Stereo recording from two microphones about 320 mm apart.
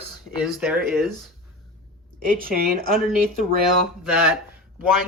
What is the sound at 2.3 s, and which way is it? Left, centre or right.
A woman's voice, right.